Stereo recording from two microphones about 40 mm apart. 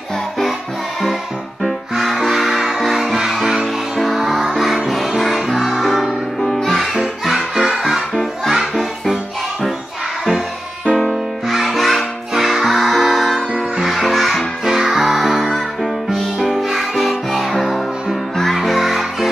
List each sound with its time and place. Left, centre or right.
1.6 s music: centre
7.0 s music: centre
11.1 s music: centre
14.6 s music: centre